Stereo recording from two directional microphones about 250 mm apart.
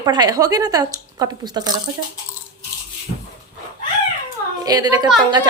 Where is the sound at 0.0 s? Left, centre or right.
Centre.